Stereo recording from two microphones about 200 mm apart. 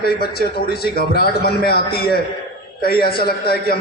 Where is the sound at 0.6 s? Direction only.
50° left (ahead or behind).